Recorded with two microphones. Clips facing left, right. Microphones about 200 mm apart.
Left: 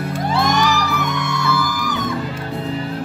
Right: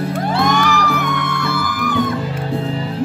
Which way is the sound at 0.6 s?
55° right (ahead or behind).